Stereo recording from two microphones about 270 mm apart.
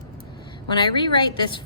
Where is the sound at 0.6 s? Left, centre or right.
Centre.